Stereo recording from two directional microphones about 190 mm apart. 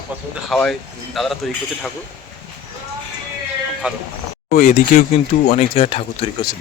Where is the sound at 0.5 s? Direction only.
Centre (ahead or behind).